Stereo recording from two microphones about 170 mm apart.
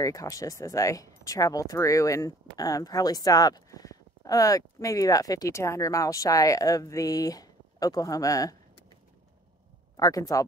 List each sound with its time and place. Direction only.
0.0 s speech: 20° left (ahead or behind)
9.9 s speech: 20° left (ahead or behind)